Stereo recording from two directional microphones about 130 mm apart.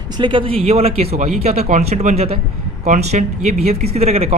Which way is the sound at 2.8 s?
65° right (ahead or behind).